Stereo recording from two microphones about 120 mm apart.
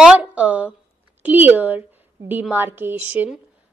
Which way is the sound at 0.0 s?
10° right (ahead or behind).